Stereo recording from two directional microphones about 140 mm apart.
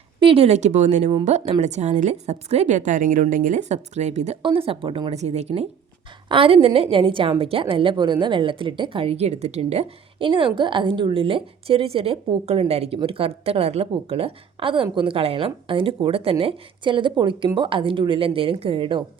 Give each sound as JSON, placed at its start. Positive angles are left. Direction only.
{"t": 0.2, "sound": "a woman's voice", "side_deg": -40}
{"t": 4.4, "sound": "a woman's voice", "side_deg": -40}
{"t": 5.1, "sound": "speech", "side_deg": -50}
{"t": 6.2, "sound": "a woman's voice", "side_deg": -40}